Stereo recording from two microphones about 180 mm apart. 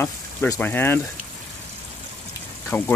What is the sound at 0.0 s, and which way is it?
Speech, 10° left (ahead or behind).